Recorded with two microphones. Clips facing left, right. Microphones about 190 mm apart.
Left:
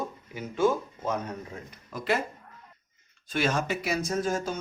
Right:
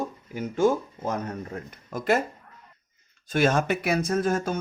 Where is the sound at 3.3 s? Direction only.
50° right (ahead or behind).